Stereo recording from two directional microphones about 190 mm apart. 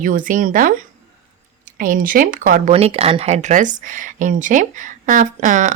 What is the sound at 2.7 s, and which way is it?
Speech, 30° right (ahead or behind).